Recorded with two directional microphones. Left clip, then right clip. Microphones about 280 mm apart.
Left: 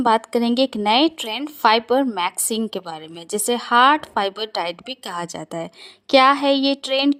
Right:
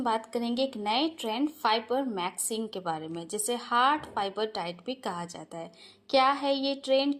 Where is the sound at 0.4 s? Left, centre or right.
Left.